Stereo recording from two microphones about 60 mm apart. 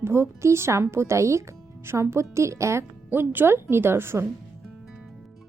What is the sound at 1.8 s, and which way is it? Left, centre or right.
A woman's voice, right.